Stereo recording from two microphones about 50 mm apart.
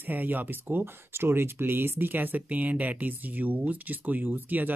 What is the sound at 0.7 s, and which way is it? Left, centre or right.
Speech, right.